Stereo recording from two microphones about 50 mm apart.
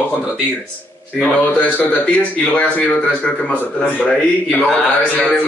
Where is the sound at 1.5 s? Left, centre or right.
Left.